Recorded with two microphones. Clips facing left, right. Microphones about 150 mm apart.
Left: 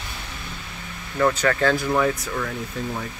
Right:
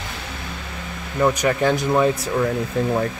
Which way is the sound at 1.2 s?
15° right (ahead or behind).